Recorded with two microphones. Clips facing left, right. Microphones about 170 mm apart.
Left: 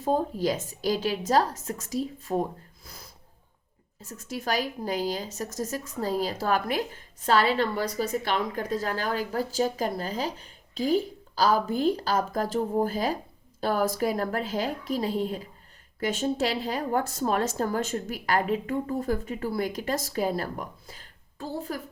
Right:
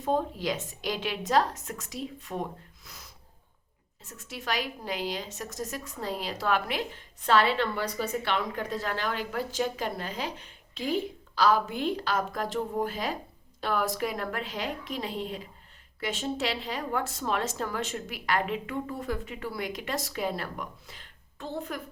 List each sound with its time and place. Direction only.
0.0 s a woman's voice: 35° left (ahead or behind)
4.2 s a woman's voice: 40° left (ahead or behind)